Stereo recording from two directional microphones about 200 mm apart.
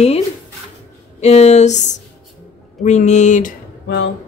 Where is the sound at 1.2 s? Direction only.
35° left (ahead or behind).